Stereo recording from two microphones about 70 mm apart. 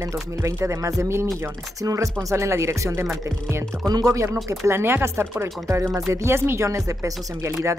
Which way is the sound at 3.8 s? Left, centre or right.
Right.